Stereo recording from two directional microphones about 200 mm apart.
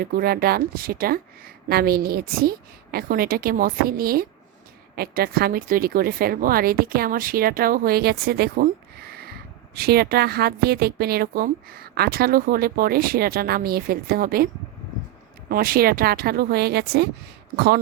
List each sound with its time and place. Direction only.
0.0 s a woman's voice: 50° right (ahead or behind)